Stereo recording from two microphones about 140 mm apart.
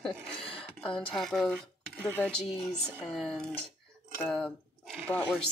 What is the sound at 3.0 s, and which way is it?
Speech, centre (ahead or behind).